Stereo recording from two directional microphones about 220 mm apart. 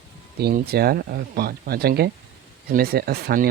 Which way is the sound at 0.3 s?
45° right (ahead or behind).